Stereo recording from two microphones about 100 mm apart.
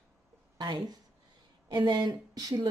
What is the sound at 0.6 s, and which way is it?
A woman's voice, 45° right (ahead or behind).